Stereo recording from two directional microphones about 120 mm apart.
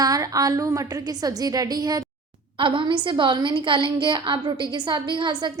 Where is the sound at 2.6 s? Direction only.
45° right (ahead or behind).